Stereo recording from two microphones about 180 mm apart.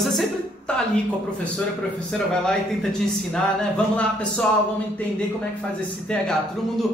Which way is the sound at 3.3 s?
5° left (ahead or behind).